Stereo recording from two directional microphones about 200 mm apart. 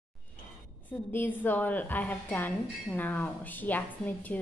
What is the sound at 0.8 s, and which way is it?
A woman's voice, 10° left (ahead or behind).